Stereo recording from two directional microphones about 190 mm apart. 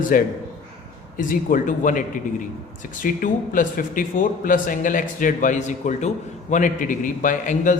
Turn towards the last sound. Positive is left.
turn(degrees=45)  # may be behind; listen again after turning